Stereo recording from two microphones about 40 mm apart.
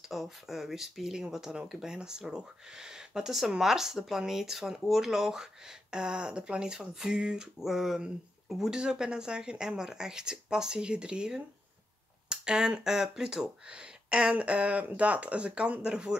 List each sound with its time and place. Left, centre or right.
0.1 s speech: centre
7.6 s speech: centre
8.6 s speech: centre